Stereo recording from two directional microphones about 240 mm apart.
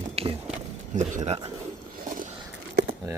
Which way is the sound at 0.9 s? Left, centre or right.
Right.